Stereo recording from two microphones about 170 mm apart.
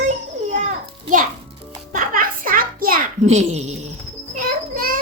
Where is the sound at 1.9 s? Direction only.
55° right (ahead or behind).